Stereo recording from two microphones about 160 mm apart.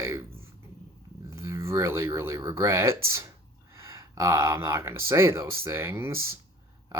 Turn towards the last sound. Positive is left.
turn(degrees=-15)  # may be behind; listen again after turning